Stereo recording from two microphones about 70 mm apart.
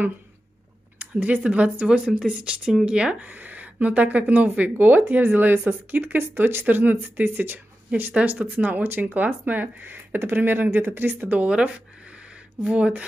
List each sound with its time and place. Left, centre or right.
0.9 s speech: right